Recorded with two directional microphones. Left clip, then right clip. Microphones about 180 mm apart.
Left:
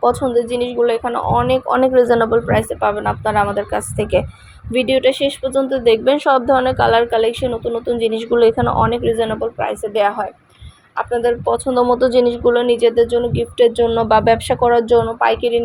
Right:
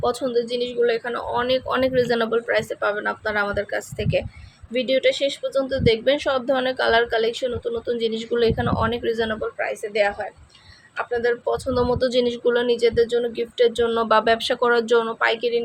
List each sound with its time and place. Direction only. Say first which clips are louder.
0.0 s a woman's voice: left 7 dB; 10° left (ahead or behind)
8.0 s speech: left 6 dB; 20° right (ahead or behind)
8.3 s speech: left 8 dB; 10° left (ahead or behind)
9.6 s speech: left 5 dB; 20° left (ahead or behind)
11.7 s a woman's voice: left 7 dB; 5° left (ahead or behind)